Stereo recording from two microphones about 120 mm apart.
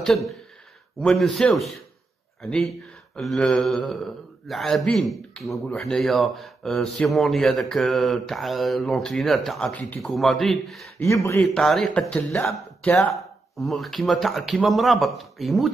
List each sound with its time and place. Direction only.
0.0 s a man's voice: centre (ahead or behind)
3.2 s a man's voice: 5° left (ahead or behind)
11.1 s speech: 25° left (ahead or behind)
11.4 s a man's voice: 5° left (ahead or behind)